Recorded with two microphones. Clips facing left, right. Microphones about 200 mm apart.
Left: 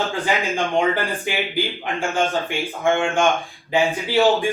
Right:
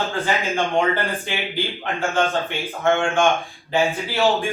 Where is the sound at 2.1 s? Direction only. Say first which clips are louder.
Even; 15° left (ahead or behind).